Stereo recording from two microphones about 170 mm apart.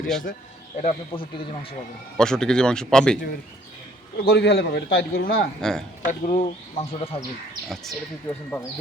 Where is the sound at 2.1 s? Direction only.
5° left (ahead or behind).